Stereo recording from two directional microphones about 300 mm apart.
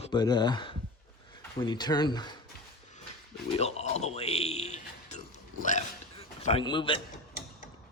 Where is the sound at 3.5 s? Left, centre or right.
Left.